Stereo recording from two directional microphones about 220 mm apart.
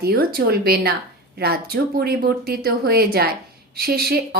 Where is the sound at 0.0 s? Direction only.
45° right (ahead or behind).